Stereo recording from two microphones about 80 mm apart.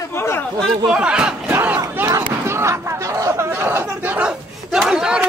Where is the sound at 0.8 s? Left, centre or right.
Centre.